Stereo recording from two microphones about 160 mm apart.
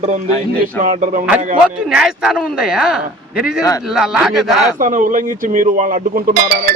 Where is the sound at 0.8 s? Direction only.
55° right (ahead or behind).